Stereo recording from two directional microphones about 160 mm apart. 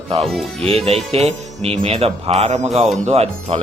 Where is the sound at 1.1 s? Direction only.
40° right (ahead or behind).